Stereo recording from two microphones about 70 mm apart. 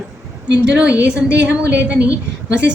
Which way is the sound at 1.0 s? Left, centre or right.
Centre.